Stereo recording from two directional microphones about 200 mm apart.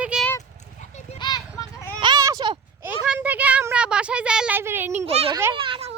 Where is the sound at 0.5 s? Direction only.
35° left (ahead or behind).